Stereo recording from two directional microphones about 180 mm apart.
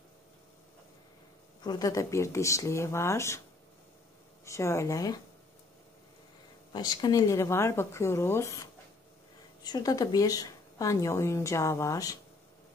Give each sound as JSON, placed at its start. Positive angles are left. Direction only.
{"t": 1.6, "sound": "speech", "side_deg": 20}
{"t": 4.5, "sound": "speech", "side_deg": 15}
{"t": 6.7, "sound": "a woman's voice", "side_deg": 20}